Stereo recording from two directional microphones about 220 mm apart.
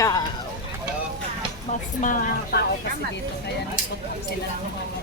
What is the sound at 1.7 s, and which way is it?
Speech, 30° left (ahead or behind).